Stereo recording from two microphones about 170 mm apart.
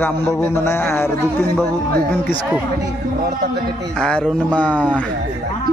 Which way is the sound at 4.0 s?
5° left (ahead or behind).